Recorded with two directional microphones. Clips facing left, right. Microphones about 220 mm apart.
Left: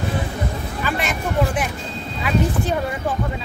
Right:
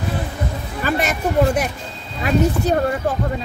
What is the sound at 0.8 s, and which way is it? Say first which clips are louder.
Speech: right 5 dB; 40° right (ahead or behind).